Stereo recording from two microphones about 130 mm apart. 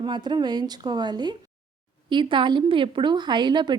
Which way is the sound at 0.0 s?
35° right (ahead or behind).